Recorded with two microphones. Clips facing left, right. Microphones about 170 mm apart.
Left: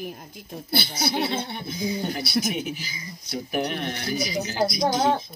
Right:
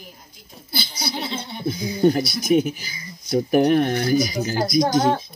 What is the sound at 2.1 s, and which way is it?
Speech, 45° right (ahead or behind).